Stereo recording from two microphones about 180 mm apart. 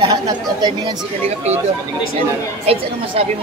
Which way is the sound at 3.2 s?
35° right (ahead or behind).